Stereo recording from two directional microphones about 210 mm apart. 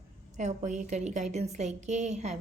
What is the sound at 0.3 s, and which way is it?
A woman's voice, 35° right (ahead or behind).